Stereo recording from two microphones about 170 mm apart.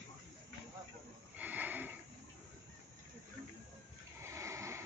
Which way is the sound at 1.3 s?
10° right (ahead or behind).